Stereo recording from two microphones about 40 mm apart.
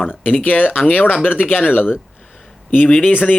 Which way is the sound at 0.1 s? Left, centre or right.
Left.